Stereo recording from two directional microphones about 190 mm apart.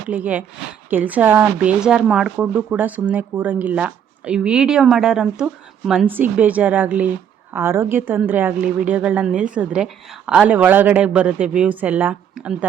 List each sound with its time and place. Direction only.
0.1 s speech: 10° right (ahead or behind)